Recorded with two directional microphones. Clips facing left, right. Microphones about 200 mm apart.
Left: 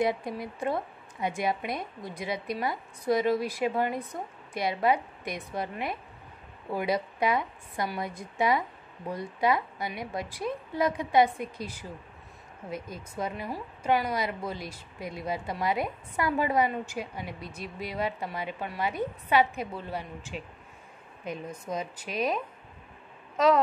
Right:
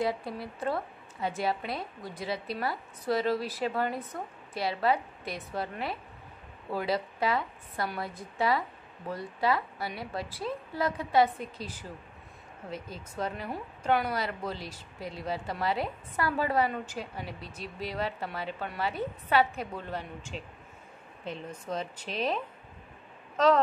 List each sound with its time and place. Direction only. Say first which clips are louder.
0.0 s a woman's voice: left 3 dB; 15° left (ahead or behind)
21.6 s a woman's voice: even; 10° left (ahead or behind)